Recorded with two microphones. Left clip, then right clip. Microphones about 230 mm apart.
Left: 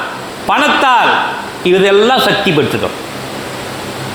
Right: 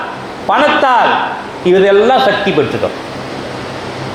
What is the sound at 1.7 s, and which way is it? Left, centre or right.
Speech, left.